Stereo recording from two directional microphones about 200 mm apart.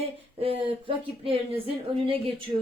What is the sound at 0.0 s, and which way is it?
Speech, 30° right (ahead or behind).